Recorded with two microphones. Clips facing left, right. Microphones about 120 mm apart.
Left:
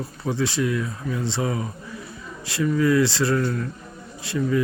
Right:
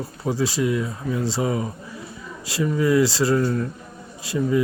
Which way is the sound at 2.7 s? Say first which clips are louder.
Even; 20° right (ahead or behind).